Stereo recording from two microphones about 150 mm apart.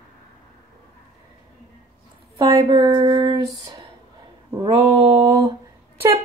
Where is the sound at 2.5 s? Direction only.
30° right (ahead or behind).